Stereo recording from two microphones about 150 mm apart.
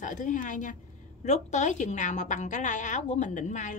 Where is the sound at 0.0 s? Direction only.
55° left (ahead or behind).